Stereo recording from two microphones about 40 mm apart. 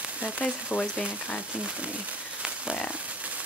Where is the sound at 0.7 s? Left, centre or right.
Left.